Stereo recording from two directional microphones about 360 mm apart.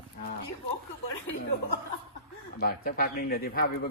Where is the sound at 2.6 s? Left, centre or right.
Left.